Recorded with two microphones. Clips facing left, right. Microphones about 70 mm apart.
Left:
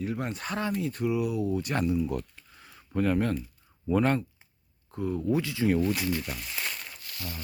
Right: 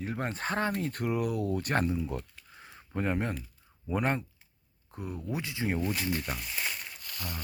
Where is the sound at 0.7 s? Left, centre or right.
Right.